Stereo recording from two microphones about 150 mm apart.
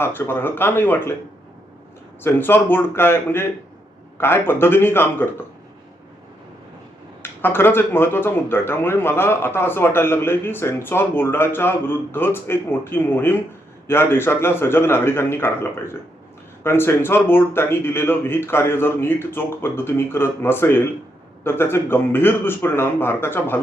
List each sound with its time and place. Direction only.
0.0 s speech: 15° left (ahead or behind)
2.2 s speech: 15° left (ahead or behind)
7.2 s speech: 15° left (ahead or behind)